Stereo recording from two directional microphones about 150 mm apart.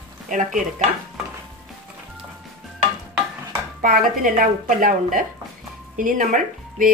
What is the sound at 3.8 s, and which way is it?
Speech, 65° right (ahead or behind).